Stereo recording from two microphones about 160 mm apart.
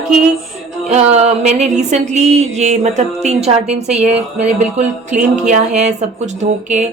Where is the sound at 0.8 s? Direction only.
45° right (ahead or behind).